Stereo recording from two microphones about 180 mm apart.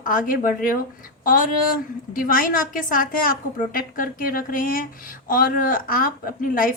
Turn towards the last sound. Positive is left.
turn(degrees=50)  # may be behind; listen again after turning